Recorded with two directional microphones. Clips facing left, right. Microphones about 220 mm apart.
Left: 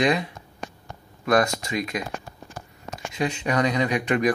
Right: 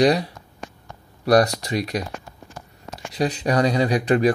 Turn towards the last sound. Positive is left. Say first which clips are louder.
# right 4 dB
turn(degrees=-35)  # may be behind; listen again after turning